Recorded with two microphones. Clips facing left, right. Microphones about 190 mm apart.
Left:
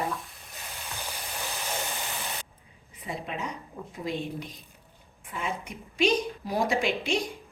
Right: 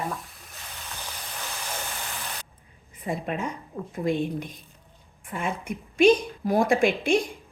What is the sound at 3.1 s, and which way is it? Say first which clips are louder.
A woman's voice: right 5 dB; 50° right (ahead or behind).